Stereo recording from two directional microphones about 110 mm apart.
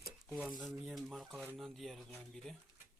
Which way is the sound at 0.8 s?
5° right (ahead or behind).